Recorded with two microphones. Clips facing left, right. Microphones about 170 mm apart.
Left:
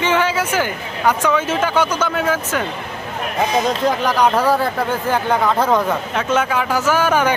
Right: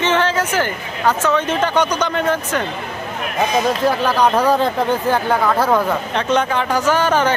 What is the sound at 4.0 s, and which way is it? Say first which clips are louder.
Speech: right 1 dB; 15° left (ahead or behind).